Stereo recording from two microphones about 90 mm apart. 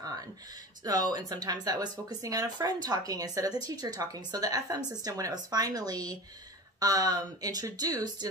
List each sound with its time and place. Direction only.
0.8 s speech: 45° right (ahead or behind)